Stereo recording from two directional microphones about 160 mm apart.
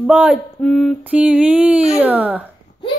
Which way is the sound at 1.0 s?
5° right (ahead or behind).